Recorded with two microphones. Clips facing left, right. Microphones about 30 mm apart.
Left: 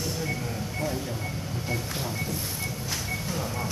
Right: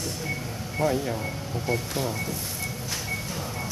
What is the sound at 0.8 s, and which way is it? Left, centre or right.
Speech, centre.